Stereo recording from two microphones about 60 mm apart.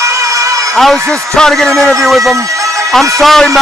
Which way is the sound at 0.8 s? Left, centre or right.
Centre.